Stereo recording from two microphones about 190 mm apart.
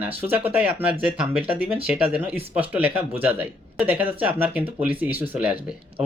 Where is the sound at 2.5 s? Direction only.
10° right (ahead or behind).